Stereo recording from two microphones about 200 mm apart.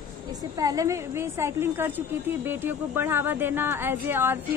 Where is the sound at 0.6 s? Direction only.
15° right (ahead or behind).